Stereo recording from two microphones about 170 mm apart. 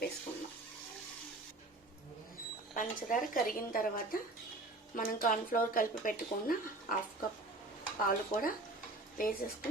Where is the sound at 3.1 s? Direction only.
55° left (ahead or behind).